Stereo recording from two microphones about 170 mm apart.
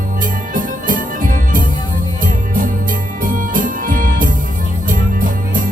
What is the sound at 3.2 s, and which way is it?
Music, 55° right (ahead or behind).